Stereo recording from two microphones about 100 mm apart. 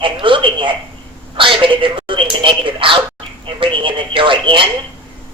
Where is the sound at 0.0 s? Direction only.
55° right (ahead or behind).